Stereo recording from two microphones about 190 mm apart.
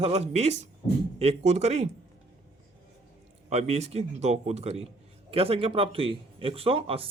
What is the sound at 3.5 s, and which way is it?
Speech, 35° right (ahead or behind).